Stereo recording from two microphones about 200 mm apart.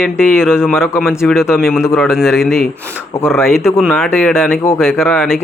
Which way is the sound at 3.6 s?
10° left (ahead or behind).